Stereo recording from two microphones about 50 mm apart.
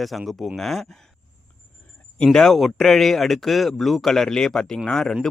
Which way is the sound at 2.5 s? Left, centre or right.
Centre.